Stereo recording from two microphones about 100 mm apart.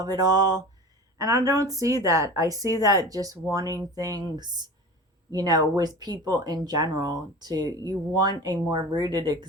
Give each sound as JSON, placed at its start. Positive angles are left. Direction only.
{"t": 0.0, "sound": "speech", "side_deg": -40}